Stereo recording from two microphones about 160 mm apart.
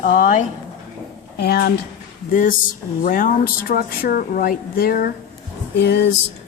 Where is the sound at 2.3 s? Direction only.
55° left (ahead or behind).